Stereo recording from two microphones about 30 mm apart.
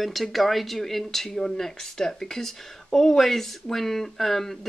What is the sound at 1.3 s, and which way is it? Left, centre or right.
Speech, centre.